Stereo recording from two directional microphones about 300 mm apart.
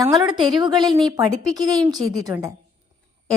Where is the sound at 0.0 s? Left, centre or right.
Centre.